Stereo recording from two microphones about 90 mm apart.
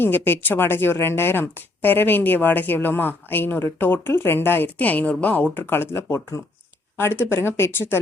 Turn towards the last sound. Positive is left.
turn(degrees=25)  # may be behind; listen again after turning